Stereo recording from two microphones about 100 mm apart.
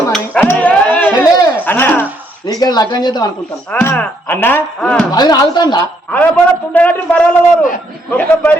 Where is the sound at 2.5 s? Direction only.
40° left (ahead or behind).